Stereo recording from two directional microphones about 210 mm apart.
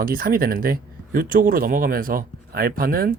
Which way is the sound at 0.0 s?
45° right (ahead or behind).